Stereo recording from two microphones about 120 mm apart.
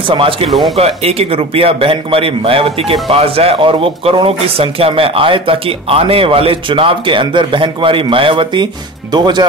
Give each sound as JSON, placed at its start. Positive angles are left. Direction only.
{"t": 0.1, "sound": "a man's voice", "side_deg": -45}
{"t": 0.5, "sound": "speech", "side_deg": 0}
{"t": 0.7, "sound": "a man's voice", "side_deg": -55}